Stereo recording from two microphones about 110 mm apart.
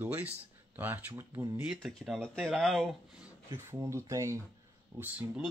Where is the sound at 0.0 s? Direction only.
15° right (ahead or behind).